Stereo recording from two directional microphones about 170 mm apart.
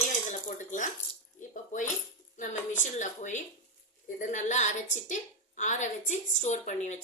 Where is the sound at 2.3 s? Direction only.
45° left (ahead or behind).